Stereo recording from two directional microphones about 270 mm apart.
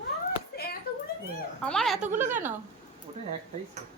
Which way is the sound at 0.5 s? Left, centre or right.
Left.